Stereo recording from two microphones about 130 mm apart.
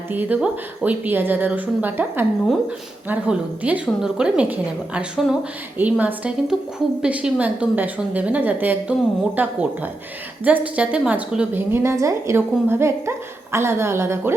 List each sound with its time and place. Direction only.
0.1 s a woman's voice: 15° right (ahead or behind)
11.7 s speech: 20° right (ahead or behind)